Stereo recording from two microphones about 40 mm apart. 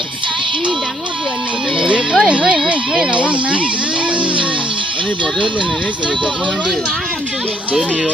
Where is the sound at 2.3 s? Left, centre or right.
Right.